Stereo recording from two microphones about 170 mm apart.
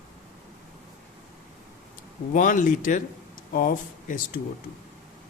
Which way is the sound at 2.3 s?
50° left (ahead or behind).